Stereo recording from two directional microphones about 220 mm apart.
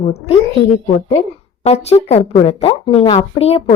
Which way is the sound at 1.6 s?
30° left (ahead or behind).